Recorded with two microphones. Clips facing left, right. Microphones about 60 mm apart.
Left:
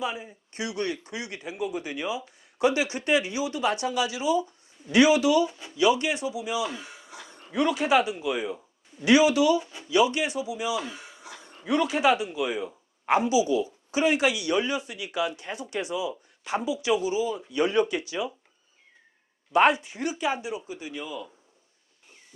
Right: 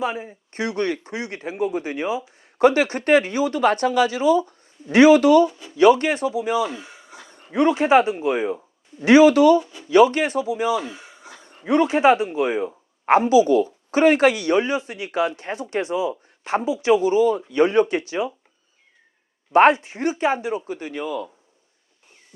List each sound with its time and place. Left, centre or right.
0.0 s a man's voice: right
5.5 s speech: centre
5.7 s speech: right
6.7 s a sound: right
7.5 s a man's voice: right
10.8 s a sound: right
11.4 s a man's voice: right
17.5 s a man's voice: right
19.5 s a man's voice: right